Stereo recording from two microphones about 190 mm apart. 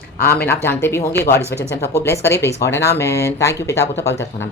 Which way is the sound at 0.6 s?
10° left (ahead or behind).